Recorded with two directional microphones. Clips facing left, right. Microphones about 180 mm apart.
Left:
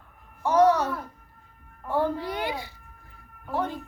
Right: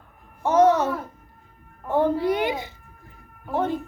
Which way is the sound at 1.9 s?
20° right (ahead or behind).